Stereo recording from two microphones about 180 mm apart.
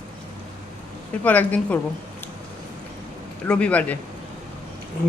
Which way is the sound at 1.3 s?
10° left (ahead or behind).